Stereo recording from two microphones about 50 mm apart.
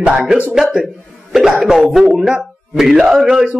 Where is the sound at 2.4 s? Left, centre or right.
Centre.